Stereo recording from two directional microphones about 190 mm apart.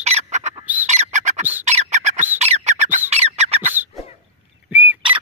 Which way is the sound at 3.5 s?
10° right (ahead or behind).